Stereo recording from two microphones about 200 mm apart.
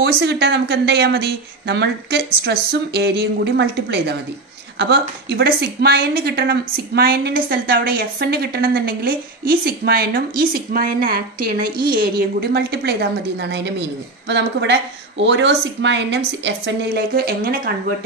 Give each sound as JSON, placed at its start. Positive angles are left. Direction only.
{"t": 0.0, "sound": "a woman's voice", "side_deg": -55}